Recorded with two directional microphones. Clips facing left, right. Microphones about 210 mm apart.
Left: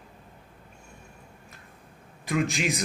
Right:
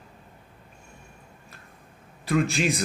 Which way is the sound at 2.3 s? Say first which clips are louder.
Right 3 dB; 15° left (ahead or behind).